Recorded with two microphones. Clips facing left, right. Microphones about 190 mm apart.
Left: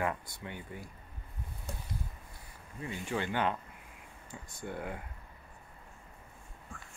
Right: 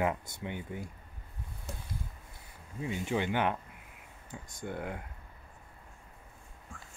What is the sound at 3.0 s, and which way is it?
Speech, 15° right (ahead or behind).